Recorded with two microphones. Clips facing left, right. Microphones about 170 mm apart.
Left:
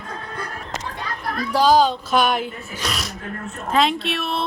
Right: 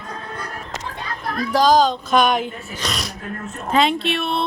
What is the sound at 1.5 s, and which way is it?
A man's voice, 10° left (ahead or behind).